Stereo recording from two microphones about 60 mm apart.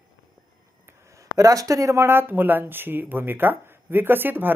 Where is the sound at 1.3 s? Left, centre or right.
Right.